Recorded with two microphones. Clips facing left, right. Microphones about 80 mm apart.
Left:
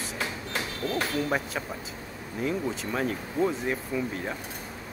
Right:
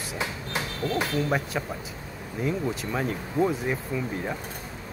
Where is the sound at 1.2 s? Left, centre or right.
Centre.